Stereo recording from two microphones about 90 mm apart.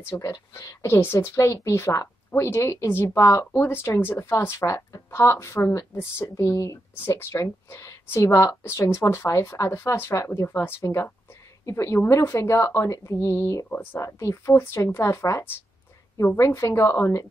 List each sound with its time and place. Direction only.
0.2 s a woman's voice: 40° left (ahead or behind)